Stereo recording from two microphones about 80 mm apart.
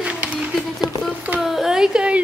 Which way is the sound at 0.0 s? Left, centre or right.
Centre.